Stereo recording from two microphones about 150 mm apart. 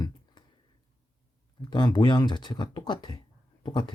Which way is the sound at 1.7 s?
30° left (ahead or behind).